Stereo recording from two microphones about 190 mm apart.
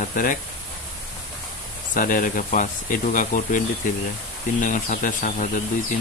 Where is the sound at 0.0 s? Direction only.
45° left (ahead or behind).